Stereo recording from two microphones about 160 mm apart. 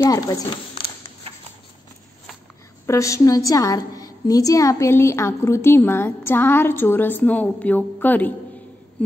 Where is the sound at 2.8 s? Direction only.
20° left (ahead or behind).